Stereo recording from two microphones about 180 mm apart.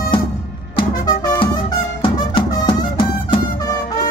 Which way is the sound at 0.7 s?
25° left (ahead or behind).